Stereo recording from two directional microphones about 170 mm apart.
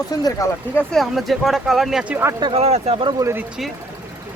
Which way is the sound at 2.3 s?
30° right (ahead or behind).